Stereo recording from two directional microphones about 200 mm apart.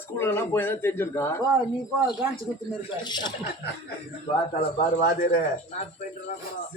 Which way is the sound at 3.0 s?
20° left (ahead or behind).